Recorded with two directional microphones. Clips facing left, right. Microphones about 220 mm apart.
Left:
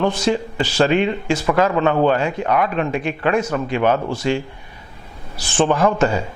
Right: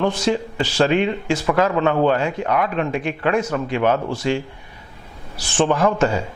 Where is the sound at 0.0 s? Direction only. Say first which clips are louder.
Left 1 dB; 10° left (ahead or behind).